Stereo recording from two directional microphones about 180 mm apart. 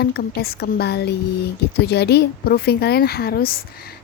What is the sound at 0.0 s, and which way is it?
A woman's voice, 60° left (ahead or behind).